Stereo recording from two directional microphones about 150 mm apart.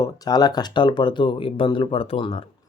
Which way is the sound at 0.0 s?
25° left (ahead or behind).